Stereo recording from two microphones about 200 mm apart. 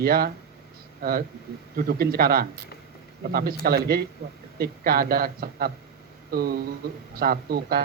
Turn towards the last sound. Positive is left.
turn(degrees=-50)  # may be behind; listen again after turning